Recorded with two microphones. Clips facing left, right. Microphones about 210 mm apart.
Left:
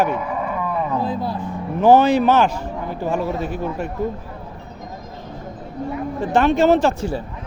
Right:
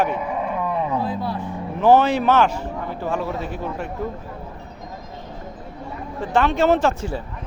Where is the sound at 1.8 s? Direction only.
40° left (ahead or behind).